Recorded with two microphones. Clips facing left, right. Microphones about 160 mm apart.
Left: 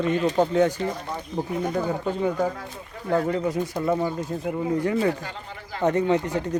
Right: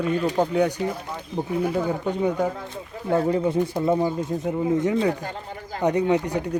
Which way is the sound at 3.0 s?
25° right (ahead or behind).